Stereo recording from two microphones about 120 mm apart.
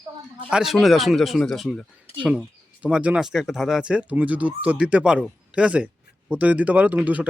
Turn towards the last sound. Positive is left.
turn(degrees=-10)  # may be behind; listen again after turning